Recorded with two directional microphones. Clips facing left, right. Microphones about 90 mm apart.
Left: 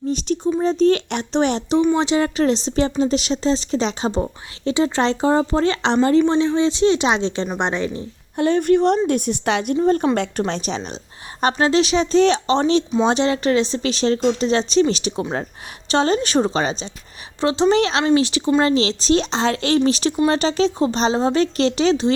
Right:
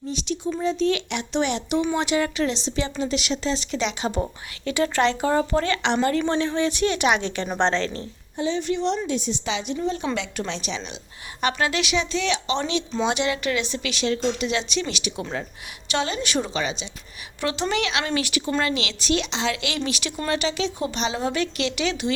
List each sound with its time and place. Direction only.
0.1 s speech: 40° left (ahead or behind)
4.2 s speech: 25° left (ahead or behind)
7.4 s speech: 5° left (ahead or behind)
7.7 s speech: 15° left (ahead or behind)
8.4 s a woman's voice: 55° left (ahead or behind)
17.4 s speech: 25° left (ahead or behind)